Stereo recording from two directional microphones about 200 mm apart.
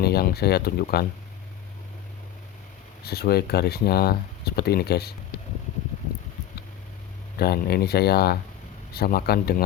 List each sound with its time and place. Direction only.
0.0 s speech: 50° left (ahead or behind)
3.0 s speech: 50° left (ahead or behind)
7.3 s speech: 50° left (ahead or behind)